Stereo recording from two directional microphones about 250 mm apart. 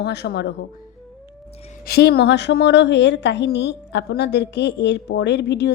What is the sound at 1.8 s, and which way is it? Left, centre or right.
A woman's voice, left.